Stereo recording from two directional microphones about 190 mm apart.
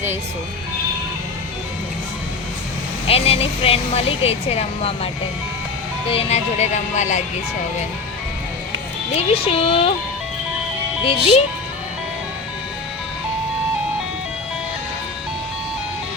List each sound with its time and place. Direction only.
3.1 s speech: 30° left (ahead or behind)
6.1 s speech: 35° left (ahead or behind)
9.1 s speech: 30° left (ahead or behind)
11.0 s speech: 30° left (ahead or behind)